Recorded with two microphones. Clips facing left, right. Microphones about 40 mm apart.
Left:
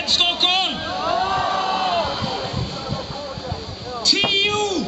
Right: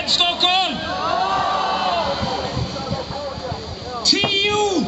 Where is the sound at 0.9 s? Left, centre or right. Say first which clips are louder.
Right 1 dB; centre.